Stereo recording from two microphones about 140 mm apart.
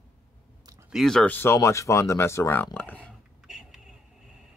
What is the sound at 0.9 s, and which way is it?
Speech, centre (ahead or behind).